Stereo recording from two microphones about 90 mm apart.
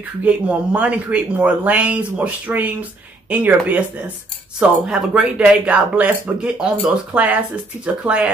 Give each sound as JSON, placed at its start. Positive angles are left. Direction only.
{"t": 0.2, "sound": "speech", "side_deg": -15}